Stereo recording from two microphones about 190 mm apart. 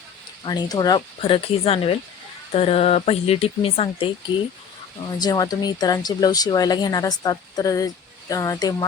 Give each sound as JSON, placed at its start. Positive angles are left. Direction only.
{"t": 0.4, "sound": "speech", "side_deg": 20}
{"t": 5.2, "sound": "speech", "side_deg": 20}